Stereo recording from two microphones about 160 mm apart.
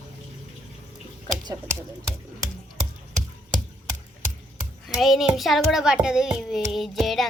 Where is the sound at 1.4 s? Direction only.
20° right (ahead or behind).